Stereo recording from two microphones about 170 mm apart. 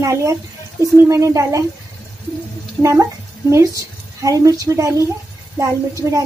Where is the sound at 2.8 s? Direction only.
15° right (ahead or behind).